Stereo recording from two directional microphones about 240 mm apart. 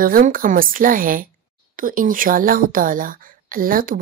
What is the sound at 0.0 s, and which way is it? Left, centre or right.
A woman's voice, right.